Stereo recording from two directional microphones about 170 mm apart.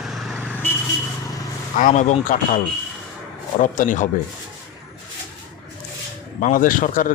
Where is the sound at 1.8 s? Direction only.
45° left (ahead or behind).